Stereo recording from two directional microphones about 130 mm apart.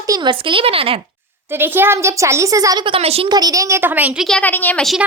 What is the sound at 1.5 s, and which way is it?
Speech, 15° right (ahead or behind).